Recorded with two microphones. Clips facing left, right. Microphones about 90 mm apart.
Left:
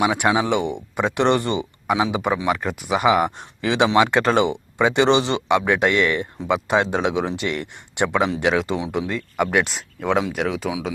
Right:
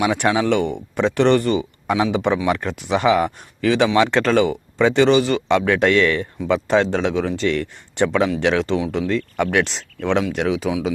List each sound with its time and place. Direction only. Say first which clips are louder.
0.0 s speech: right 1 dB; 15° left (ahead or behind)